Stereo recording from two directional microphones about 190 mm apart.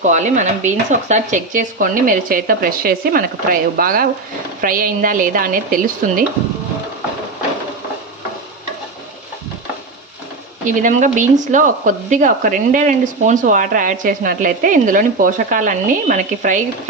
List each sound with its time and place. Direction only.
0.0 s speech: 40° right (ahead or behind)
10.7 s speech: 40° right (ahead or behind)